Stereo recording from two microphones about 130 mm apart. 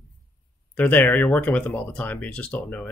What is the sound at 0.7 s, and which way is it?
Speech, 15° left (ahead or behind).